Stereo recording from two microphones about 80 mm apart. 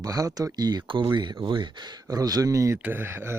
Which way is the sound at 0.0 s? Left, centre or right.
Right.